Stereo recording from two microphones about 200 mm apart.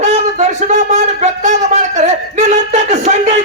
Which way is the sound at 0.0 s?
35° right (ahead or behind).